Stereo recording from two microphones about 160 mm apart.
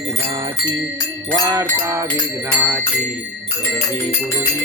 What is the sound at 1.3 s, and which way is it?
Jingle bell, 20° right (ahead or behind).